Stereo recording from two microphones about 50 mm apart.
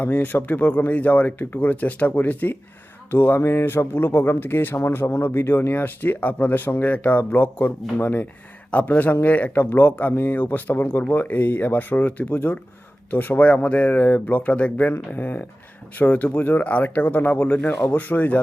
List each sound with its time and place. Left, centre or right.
0.0 s speech: left
3.1 s speech: left
6.7 s speech: left
6.9 s speech: left
9.6 s speech: left
10.2 s speech: left